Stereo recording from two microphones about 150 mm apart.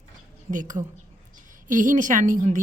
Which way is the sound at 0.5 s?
60° right (ahead or behind).